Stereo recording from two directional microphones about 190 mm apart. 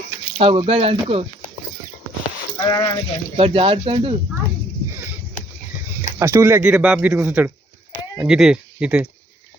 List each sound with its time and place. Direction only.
0.3 s speech: 30° right (ahead or behind)
2.6 s speech: 20° left (ahead or behind)
3.3 s speech: 30° right (ahead or behind)
6.1 s speech: 15° right (ahead or behind)